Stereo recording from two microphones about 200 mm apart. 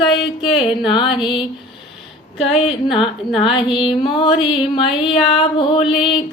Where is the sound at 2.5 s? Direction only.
25° left (ahead or behind).